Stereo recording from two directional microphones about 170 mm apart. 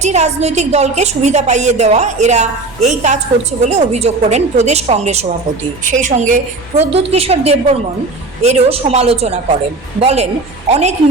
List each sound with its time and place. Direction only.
0.0 s a woman's voice: 40° right (ahead or behind)